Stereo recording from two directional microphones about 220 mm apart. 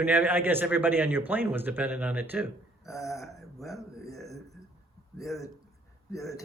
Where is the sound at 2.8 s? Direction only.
15° left (ahead or behind).